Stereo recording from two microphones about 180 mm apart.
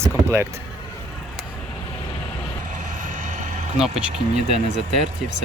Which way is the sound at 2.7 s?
45° right (ahead or behind).